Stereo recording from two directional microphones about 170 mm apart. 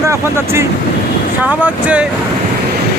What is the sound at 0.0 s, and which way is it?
Speech, 15° right (ahead or behind).